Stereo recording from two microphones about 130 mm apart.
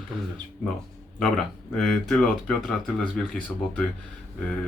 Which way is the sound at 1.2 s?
5° left (ahead or behind).